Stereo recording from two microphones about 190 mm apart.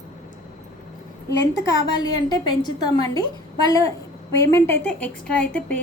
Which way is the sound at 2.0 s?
25° left (ahead or behind).